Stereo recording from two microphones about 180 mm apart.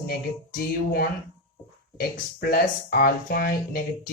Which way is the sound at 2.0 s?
55° left (ahead or behind).